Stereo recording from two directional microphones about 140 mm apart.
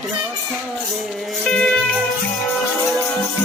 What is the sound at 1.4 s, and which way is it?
Music, 5° left (ahead or behind).